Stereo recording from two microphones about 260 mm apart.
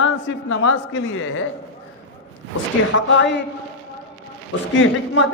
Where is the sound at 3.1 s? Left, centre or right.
Left.